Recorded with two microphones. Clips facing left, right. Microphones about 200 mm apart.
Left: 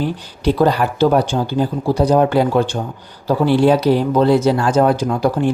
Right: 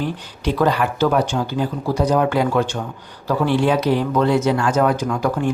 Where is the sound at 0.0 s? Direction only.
35° left (ahead or behind).